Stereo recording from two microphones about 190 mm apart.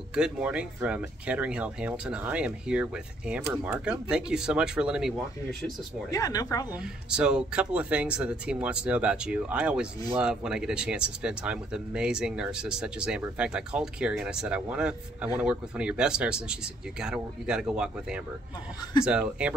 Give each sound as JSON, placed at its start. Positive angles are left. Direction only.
{"t": 0.1, "sound": "speech", "side_deg": -5}
{"t": 6.0, "sound": "speech", "side_deg": 20}
{"t": 6.7, "sound": "speech", "side_deg": -5}